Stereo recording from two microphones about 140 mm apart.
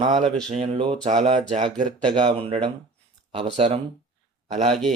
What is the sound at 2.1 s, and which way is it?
Speech, 40° right (ahead or behind).